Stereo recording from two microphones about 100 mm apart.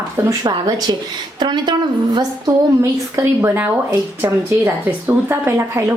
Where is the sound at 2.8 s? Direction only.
25° right (ahead or behind).